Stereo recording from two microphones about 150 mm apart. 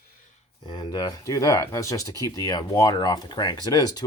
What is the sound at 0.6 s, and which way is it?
Speech, 30° left (ahead or behind).